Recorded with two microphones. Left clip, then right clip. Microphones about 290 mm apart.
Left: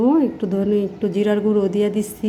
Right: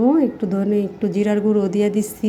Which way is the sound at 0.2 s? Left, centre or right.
Centre.